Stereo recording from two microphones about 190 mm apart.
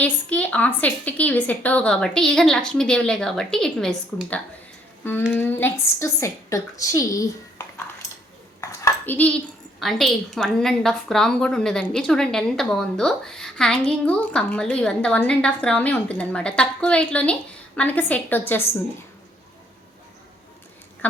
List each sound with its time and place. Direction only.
0.0 s a woman's voice: 5° left (ahead or behind)
8.6 s dishes: 15° left (ahead or behind)
9.8 s a woman's voice: centre (ahead or behind)
21.0 s a sound: 10° left (ahead or behind)